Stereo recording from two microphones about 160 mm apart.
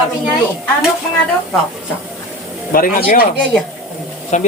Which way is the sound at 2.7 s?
65° left (ahead or behind).